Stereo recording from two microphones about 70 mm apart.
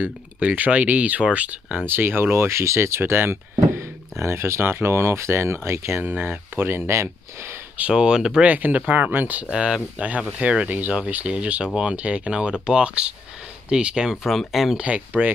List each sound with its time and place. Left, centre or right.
0.0 s speech: right
1.9 s speech: right
6.9 s speech: right
7.9 s speech: centre
8.5 s speech: right
9.5 s speech: centre
14.8 s speech: centre